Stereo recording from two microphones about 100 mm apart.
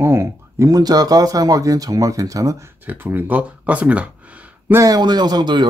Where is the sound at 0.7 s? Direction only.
40° right (ahead or behind).